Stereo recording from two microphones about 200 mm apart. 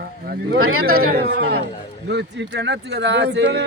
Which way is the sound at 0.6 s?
90° right.